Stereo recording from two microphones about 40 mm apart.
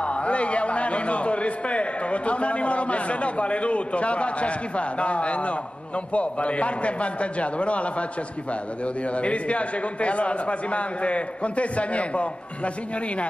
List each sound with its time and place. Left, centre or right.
0.0 s a man's voice: left